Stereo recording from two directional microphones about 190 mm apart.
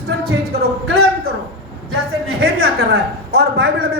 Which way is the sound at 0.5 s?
55° right (ahead or behind).